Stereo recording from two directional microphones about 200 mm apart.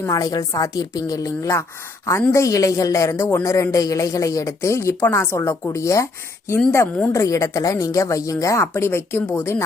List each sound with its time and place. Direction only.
0.0 s speech: 15° left (ahead or behind)